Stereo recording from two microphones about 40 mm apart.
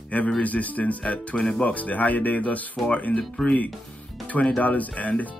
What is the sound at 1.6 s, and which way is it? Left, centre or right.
Speech, left.